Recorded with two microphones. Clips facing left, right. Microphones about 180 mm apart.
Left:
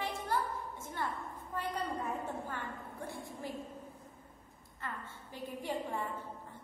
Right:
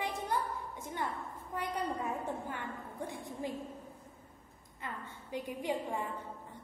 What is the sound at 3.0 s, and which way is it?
Speech, 20° right (ahead or behind).